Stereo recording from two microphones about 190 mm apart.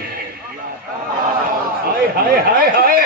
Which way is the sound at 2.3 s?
50° right (ahead or behind).